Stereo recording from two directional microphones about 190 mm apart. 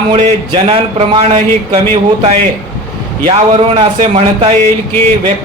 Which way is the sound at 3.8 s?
30° right (ahead or behind).